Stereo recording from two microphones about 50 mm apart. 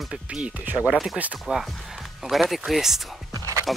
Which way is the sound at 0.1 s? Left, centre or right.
Centre.